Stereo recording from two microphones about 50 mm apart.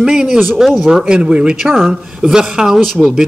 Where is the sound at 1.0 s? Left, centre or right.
Centre.